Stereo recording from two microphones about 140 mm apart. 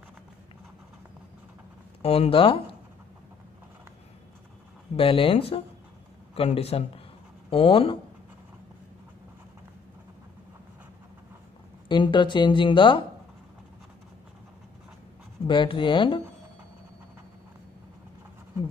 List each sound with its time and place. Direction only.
2.0 s speech: 45° left (ahead or behind)
4.9 s speech: 40° left (ahead or behind)
11.9 s speech: 35° left (ahead or behind)
15.4 s speech: 35° left (ahead or behind)